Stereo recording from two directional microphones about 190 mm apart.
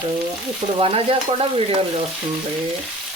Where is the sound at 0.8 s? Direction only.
30° right (ahead or behind).